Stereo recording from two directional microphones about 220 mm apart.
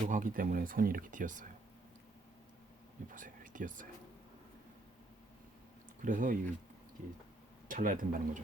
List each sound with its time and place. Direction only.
0.0 s speech: 35° right (ahead or behind)
3.1 s speech: 35° right (ahead or behind)
6.0 s speech: 40° right (ahead or behind)
7.7 s speech: 40° right (ahead or behind)